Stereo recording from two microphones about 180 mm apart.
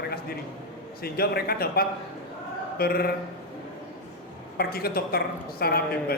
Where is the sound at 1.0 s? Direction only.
60° left (ahead or behind).